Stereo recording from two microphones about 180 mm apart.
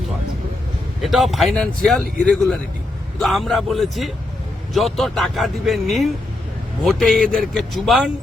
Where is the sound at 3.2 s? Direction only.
Centre (ahead or behind).